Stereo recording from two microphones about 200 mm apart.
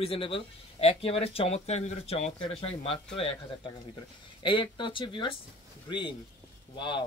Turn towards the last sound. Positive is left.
turn(degrees=25)  # may be behind; listen again after turning